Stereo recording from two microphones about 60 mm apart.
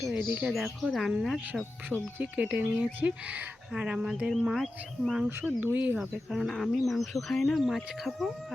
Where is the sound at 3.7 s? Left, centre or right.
Centre.